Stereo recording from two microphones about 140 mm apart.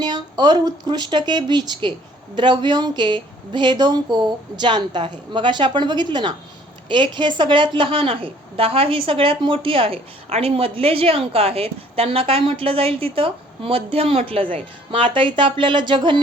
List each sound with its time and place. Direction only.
0.0 s a woman's voice: 30° right (ahead or behind)